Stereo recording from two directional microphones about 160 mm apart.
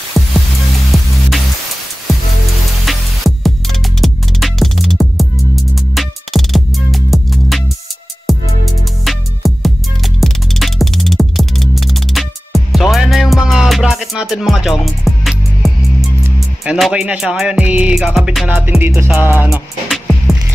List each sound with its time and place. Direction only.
0.2 s music: centre (ahead or behind)
2.8 s music: centre (ahead or behind)
18.7 s music: 15° right (ahead or behind)
19.0 s music: 5° right (ahead or behind)